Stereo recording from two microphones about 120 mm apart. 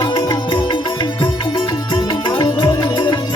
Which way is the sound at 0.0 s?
30° left (ahead or behind).